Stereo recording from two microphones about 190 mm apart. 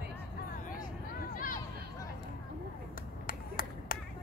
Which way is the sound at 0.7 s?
45° left (ahead or behind).